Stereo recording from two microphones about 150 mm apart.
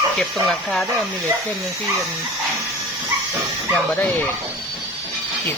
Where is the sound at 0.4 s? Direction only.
Centre (ahead or behind).